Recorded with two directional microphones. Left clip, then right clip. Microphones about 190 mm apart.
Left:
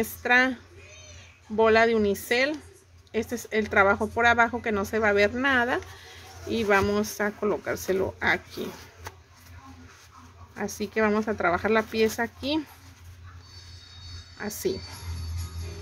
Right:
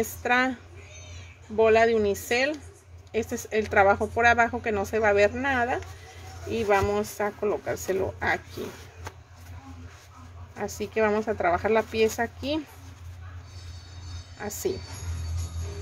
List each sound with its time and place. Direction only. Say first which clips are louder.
0.0 s a woman's voice: left 2 dB; 10° left (ahead or behind)
1.6 s a woman's voice: even; 10° left (ahead or behind)
10.5 s a woman's voice: even; 10° left (ahead or behind)
14.4 s a woman's voice: even; 15° left (ahead or behind)